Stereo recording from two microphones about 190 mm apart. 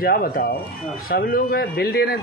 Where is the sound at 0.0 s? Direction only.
50° left (ahead or behind).